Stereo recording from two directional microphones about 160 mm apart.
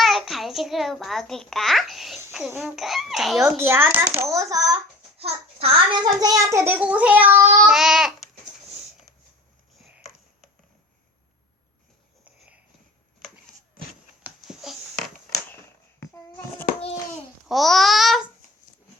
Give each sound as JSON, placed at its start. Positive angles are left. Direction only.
{"t": 0.0, "sound": "a child's voice", "side_deg": 0}
{"t": 3.4, "sound": "a child's voice", "side_deg": -15}
{"t": 5.1, "sound": "a child's voice", "side_deg": -40}
{"t": 7.7, "sound": "babbling", "side_deg": 0}
{"t": 12.2, "sound": "a sound", "side_deg": -10}
{"t": 14.3, "sound": "a sound", "side_deg": -5}
{"t": 17.5, "sound": "a child's voice", "side_deg": 0}